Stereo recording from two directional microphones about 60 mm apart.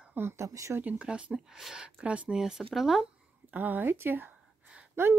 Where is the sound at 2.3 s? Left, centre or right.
Centre.